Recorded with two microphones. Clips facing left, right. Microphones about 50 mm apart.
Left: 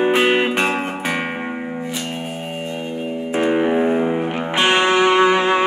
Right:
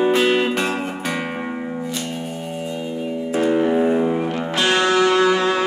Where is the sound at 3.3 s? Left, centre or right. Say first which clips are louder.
Even; left.